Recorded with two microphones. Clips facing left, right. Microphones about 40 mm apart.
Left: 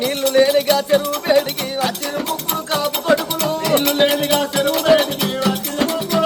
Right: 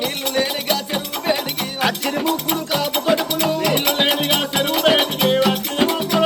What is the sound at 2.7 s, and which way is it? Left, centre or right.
Music, centre.